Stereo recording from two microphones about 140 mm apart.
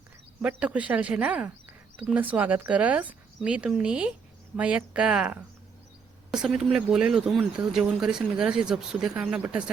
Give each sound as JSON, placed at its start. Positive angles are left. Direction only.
{"t": 0.4, "sound": "speech", "side_deg": -10}